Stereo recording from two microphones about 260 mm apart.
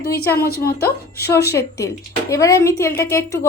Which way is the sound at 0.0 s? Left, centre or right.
Left.